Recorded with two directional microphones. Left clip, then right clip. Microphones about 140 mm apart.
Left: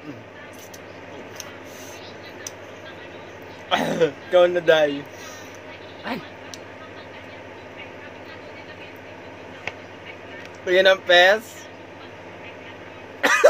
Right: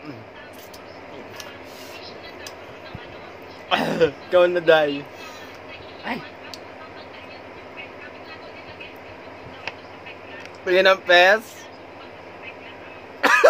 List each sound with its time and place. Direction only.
3.6 s speech: 15° right (ahead or behind)
10.6 s speech: 25° right (ahead or behind)
13.2 s cough: 20° right (ahead or behind)